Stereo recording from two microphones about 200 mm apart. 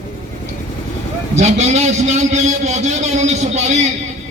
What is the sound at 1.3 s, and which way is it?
A man's voice, 35° right (ahead or behind).